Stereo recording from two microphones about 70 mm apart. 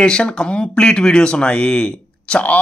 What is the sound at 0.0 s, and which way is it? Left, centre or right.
Speech, centre.